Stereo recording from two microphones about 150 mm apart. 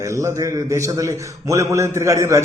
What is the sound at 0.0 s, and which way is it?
A man's voice, 20° right (ahead or behind).